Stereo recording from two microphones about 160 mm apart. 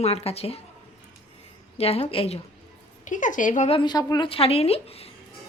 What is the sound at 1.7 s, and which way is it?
Speech, 40° left (ahead or behind).